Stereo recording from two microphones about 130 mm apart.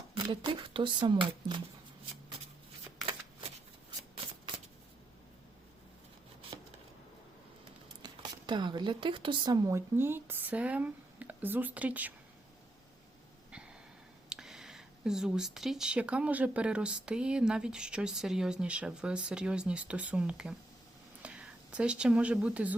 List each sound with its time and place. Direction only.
0.1 s speech: 40° right (ahead or behind)
6.4 s a sound: 45° right (ahead or behind)
8.0 s speech: 35° right (ahead or behind); by 12.1 s 10° right (ahead or behind)
14.3 s speech: 5° right (ahead or behind)